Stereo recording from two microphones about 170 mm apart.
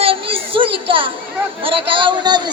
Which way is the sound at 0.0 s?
30° right (ahead or behind).